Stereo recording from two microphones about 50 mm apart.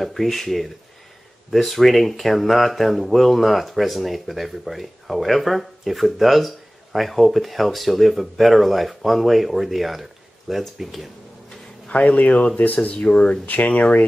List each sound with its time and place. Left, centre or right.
0.0 s speech: centre
11.9 s speech: left